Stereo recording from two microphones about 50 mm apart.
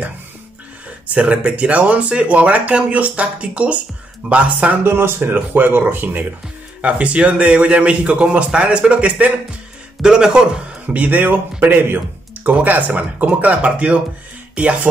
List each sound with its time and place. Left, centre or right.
0.8 s speech: right
4.8 s speech: right
6.8 s speech: right
10.9 s speech: right
12.4 s speech: right